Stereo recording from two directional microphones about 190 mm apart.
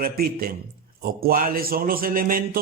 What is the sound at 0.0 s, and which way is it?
A man's voice, 50° right (ahead or behind).